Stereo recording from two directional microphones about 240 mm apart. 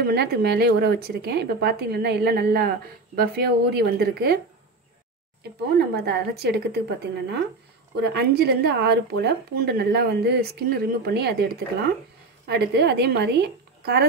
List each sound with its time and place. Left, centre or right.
0.0 s speech: right
5.4 s speech: right